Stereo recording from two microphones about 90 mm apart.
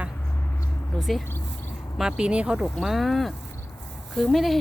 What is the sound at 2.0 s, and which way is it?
Speech, 10° right (ahead or behind).